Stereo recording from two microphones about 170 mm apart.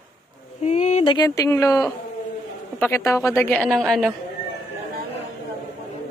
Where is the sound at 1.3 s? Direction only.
15° left (ahead or behind); by 4.1 s centre (ahead or behind).